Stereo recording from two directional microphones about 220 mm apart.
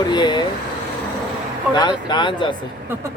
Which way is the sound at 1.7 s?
20° left (ahead or behind).